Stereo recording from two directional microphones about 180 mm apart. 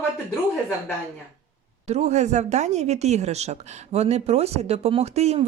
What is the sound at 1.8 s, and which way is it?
A woman's voice, 35° right (ahead or behind).